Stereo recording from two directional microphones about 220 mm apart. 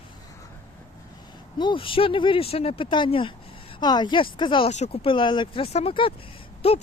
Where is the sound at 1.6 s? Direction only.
20° left (ahead or behind).